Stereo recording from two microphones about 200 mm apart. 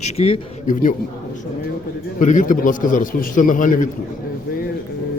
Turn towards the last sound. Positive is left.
turn(degrees=40)  # may be behind; listen again after turning